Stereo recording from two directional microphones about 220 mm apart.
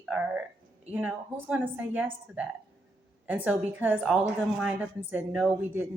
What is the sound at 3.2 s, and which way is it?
A woman's voice, 5° right (ahead or behind).